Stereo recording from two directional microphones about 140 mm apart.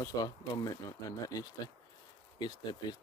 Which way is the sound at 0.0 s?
25° left (ahead or behind).